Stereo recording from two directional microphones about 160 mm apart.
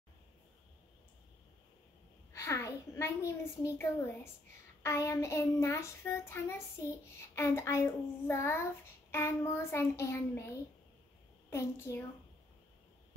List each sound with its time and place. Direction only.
2.3 s a woman's voice: 20° left (ahead or behind)
4.8 s child singing: 20° left (ahead or behind)
11.5 s a woman's voice: 20° left (ahead or behind)